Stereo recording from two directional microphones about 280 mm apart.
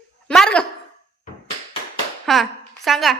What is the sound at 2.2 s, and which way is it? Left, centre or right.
Speech, centre.